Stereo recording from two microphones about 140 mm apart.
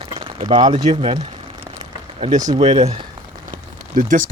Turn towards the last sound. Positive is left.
turn(degrees=-70)  # may be behind; listen again after turning